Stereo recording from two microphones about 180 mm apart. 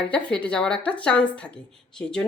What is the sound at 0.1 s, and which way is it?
A woman's voice, 5° left (ahead or behind).